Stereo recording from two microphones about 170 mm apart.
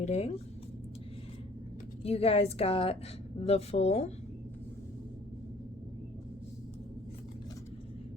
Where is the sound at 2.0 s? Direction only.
35° left (ahead or behind).